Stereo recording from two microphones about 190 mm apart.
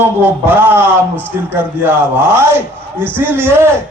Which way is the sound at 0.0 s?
10° right (ahead or behind).